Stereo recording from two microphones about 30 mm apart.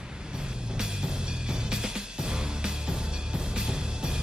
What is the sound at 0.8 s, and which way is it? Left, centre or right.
Music, right.